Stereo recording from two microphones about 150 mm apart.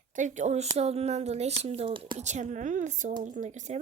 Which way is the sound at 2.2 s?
50° right (ahead or behind).